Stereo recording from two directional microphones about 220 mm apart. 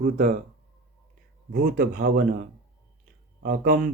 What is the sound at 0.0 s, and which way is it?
Speech, 35° right (ahead or behind).